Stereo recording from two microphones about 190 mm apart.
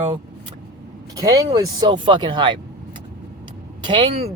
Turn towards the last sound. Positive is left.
turn(degrees=-30)  # may be behind; listen again after turning